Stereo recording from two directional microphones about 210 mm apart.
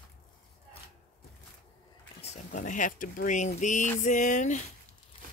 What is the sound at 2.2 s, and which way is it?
Speech, 35° left (ahead or behind).